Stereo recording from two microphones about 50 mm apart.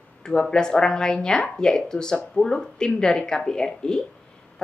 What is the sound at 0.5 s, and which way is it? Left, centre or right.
Speech, centre.